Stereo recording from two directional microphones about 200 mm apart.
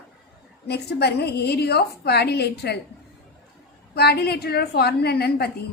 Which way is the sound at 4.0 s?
55° left (ahead or behind).